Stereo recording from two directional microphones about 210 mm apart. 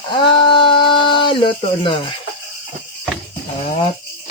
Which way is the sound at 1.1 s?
25° left (ahead or behind).